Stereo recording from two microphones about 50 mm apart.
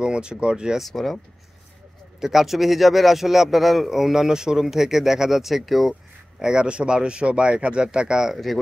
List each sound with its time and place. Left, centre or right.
0.0 s speech: centre
0.7 s a man's voice: centre
2.1 s a man's voice: centre
6.4 s speech: centre